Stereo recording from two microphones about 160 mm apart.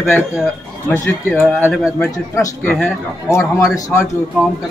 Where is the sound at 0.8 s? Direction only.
15° left (ahead or behind).